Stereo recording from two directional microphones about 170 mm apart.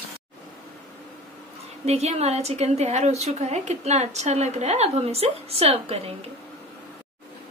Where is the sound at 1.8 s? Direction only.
40° right (ahead or behind).